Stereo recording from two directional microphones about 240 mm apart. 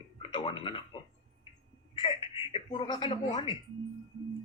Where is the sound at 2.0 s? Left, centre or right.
Left.